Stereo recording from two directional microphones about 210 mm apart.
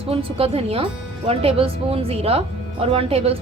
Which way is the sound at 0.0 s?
25° right (ahead or behind).